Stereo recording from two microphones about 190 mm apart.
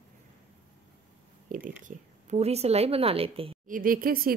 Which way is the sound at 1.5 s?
45° right (ahead or behind).